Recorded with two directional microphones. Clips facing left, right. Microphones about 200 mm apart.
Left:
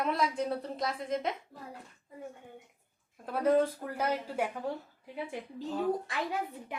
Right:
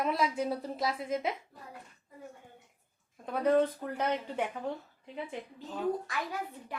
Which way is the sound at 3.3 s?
5° left (ahead or behind).